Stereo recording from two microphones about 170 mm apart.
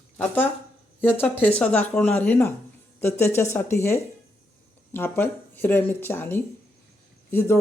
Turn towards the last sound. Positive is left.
turn(degrees=15)  # may be behind; listen again after turning